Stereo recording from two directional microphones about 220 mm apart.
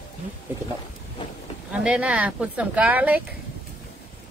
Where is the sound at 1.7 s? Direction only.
5° right (ahead or behind).